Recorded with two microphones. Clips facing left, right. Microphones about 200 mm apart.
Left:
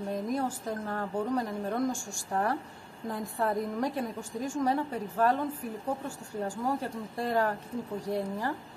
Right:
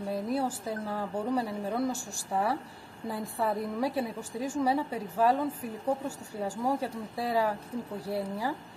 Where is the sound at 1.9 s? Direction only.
35° right (ahead or behind).